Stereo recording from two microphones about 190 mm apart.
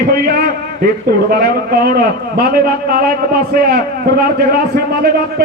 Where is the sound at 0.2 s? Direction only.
55° right (ahead or behind).